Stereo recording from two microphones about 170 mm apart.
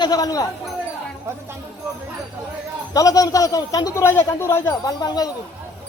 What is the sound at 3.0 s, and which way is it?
Speech, 20° left (ahead or behind).